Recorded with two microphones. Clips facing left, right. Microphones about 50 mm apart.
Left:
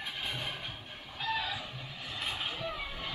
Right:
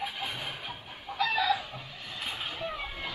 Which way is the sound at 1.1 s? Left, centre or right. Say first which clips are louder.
Right 7 dB; right.